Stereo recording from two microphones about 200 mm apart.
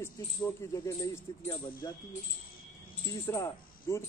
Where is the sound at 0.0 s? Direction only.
15° left (ahead or behind).